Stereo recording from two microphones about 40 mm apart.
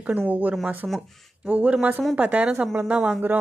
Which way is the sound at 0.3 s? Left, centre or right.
Right.